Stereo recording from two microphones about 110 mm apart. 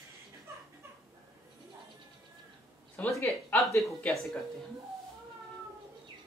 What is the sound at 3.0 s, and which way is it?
Speech, 25° left (ahead or behind).